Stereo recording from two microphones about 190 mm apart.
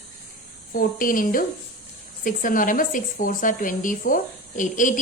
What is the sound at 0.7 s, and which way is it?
A woman's voice, 45° left (ahead or behind).